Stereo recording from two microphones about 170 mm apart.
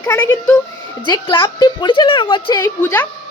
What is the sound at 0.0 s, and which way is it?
A woman's voice, 20° left (ahead or behind).